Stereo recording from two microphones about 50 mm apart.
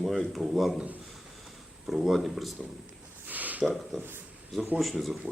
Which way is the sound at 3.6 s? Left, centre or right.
Centre.